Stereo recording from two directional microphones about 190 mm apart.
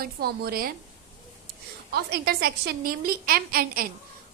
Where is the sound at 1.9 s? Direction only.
55° right (ahead or behind).